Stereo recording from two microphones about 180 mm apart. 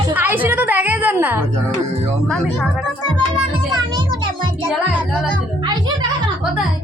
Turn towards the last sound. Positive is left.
turn(degrees=-25)  # may be behind; listen again after turning